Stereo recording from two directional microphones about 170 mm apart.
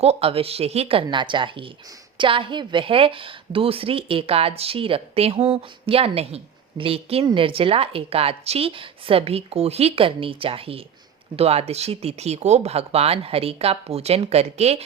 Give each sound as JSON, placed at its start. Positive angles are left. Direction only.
{"t": 0.0, "sound": "a woman's voice", "side_deg": -35}